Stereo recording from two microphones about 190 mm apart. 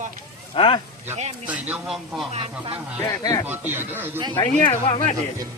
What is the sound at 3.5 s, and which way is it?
Speech, 10° right (ahead or behind).